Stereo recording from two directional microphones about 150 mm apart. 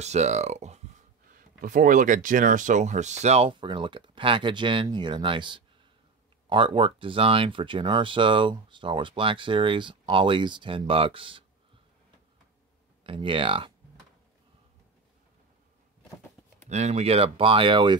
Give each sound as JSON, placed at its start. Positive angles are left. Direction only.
{"t": 0.0, "sound": "speech", "side_deg": -50}
{"t": 1.3, "sound": "speech", "side_deg": -70}
{"t": 13.0, "sound": "speech", "side_deg": -35}
{"t": 16.6, "sound": "speech", "side_deg": -50}